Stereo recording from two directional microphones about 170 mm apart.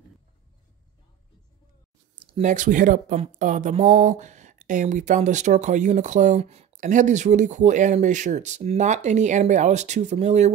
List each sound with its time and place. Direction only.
2.2 s speech: 40° right (ahead or behind)